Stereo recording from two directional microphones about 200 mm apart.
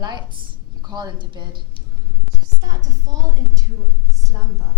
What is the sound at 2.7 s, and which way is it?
Speech, 15° right (ahead or behind).